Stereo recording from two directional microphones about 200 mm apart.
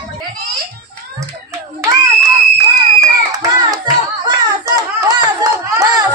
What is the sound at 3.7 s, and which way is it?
Hands, 20° right (ahead or behind).